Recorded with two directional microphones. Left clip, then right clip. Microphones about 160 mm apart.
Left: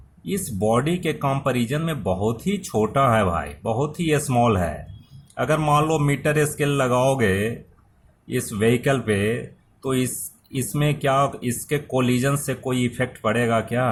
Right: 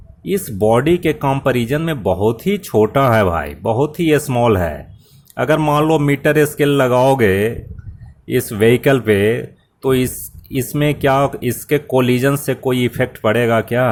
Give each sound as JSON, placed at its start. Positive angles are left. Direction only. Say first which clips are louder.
{"t": 0.3, "sound": "speech", "louder": "right 8 dB", "side_deg": -40}